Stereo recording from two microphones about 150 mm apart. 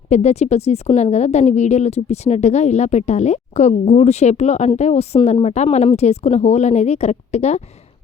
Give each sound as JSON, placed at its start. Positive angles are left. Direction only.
{"t": 0.1, "sound": "a woman's voice", "side_deg": 45}